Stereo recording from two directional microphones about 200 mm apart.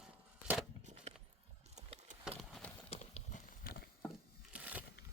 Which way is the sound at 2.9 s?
30° left (ahead or behind).